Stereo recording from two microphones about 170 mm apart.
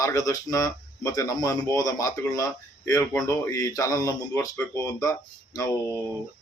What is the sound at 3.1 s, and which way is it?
Speech, 10° left (ahead or behind).